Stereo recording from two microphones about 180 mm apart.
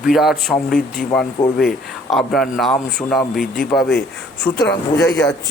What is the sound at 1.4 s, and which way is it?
Speech, 20° left (ahead or behind).